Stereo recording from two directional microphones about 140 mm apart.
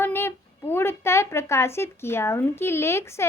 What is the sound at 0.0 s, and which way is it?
Speech, 15° left (ahead or behind).